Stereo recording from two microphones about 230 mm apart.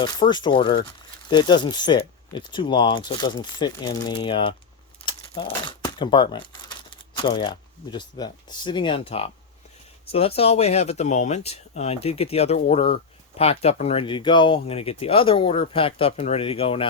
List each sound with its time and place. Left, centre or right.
0.0 s speech: centre